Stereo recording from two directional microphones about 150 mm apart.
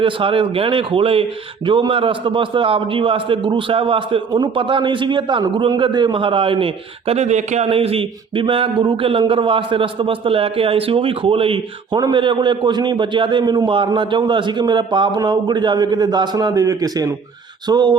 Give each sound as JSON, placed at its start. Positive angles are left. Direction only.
{"t": 0.0, "sound": "a man's voice", "side_deg": -35}
{"t": 7.1, "sound": "a man's voice", "side_deg": -50}